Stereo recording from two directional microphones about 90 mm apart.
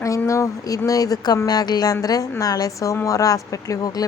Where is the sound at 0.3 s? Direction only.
35° left (ahead or behind).